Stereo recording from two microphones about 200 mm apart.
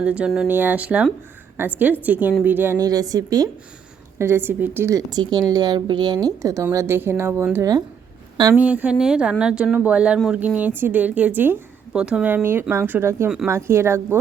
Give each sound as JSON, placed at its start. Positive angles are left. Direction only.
{"t": 0.0, "sound": "a woman's voice", "side_deg": -5}